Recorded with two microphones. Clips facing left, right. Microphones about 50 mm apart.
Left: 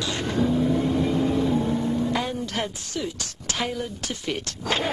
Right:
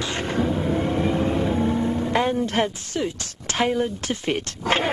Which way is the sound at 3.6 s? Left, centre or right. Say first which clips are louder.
Right 8 dB; right.